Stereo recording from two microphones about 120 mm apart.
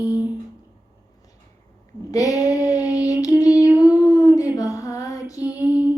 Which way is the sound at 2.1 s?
30° left (ahead or behind).